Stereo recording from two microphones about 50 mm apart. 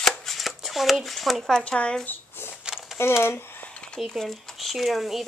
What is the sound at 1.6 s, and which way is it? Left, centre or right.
Speech, left.